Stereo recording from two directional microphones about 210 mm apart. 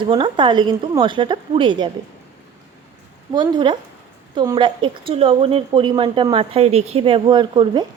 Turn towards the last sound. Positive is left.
turn(degrees=-20)  # may be behind; listen again after turning